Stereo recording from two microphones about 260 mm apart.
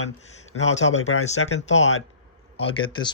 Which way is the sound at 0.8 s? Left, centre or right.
Left.